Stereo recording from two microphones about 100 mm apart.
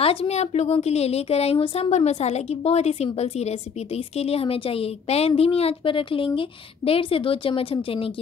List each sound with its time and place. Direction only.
0.0 s a woman's voice: 75° left (ahead or behind)